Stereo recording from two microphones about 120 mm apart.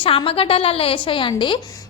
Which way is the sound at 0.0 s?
50° left (ahead or behind).